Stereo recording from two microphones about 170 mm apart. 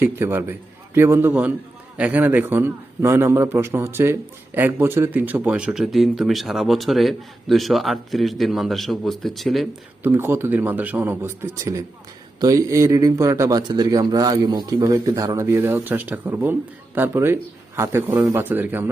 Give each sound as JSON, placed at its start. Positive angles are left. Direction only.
{"t": 0.0, "sound": "a man's voice", "side_deg": -15}
{"t": 10.0, "sound": "a man's voice", "side_deg": -15}